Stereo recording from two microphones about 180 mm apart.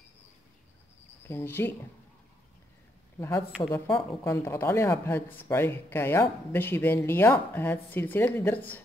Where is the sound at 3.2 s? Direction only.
15° left (ahead or behind).